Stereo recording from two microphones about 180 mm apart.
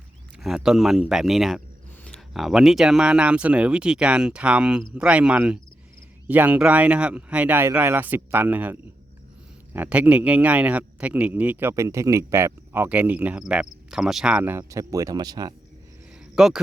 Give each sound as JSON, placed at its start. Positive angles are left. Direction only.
{"t": 0.3, "sound": "speech", "side_deg": -5}
{"t": 16.3, "sound": "speech", "side_deg": -5}